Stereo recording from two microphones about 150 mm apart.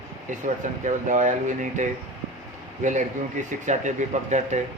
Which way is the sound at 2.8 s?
55° right (ahead or behind).